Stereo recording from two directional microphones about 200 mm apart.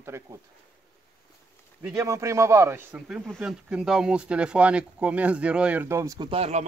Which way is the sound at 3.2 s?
Centre (ahead or behind).